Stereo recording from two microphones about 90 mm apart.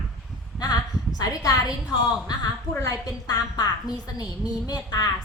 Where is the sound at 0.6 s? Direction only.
50° left (ahead or behind).